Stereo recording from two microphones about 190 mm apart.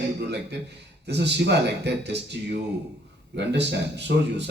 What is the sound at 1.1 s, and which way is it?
Speech, 65° right (ahead or behind).